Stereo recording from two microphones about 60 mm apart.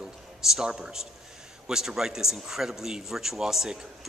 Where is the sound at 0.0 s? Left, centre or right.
Centre.